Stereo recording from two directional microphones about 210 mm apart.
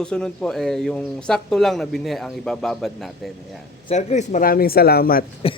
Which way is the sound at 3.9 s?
35° left (ahead or behind).